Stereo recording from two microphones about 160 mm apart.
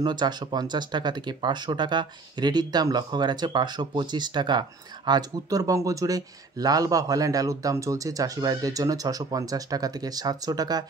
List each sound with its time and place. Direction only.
0.0 s speech: 25° right (ahead or behind)